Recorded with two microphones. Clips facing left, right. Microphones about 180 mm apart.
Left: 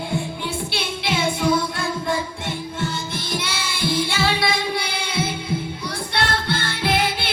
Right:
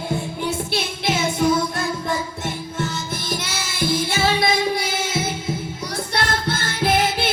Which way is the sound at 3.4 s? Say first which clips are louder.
Right 1 dB; 45° right (ahead or behind).